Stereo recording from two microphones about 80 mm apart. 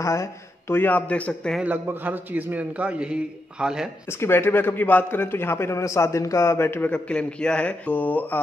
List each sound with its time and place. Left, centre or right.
0.0 s speech: left
0.7 s a man's voice: left
1.6 s a man's voice: right
4.2 s a man's voice: left
6.9 s a man's voice: centre